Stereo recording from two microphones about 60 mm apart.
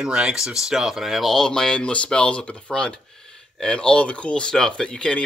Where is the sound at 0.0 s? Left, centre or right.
Centre.